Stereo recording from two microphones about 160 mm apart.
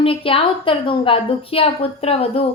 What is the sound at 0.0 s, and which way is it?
A woman's voice, 35° left (ahead or behind).